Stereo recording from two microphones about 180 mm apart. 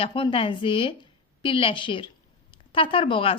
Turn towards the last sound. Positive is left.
turn(degrees=30)  # may be behind; listen again after turning